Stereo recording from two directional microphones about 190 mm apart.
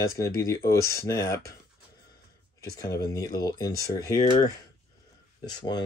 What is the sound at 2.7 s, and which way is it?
Speech, 20° left (ahead or behind).